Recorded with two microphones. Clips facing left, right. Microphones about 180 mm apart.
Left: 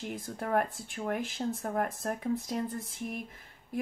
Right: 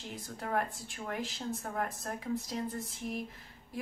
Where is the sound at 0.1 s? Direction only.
55° left (ahead or behind).